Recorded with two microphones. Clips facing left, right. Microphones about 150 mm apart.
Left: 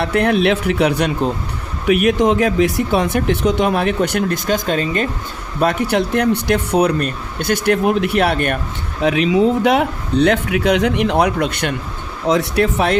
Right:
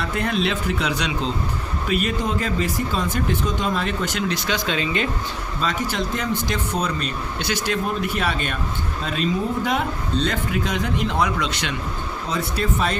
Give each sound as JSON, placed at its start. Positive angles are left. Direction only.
{"t": 0.0, "sound": "speech", "side_deg": 70}
{"t": 1.9, "sound": "a man's voice", "side_deg": 75}
{"t": 5.5, "sound": "speech", "side_deg": 60}
{"t": 7.3, "sound": "a man's voice", "side_deg": 55}
{"t": 12.3, "sound": "a man's voice", "side_deg": 75}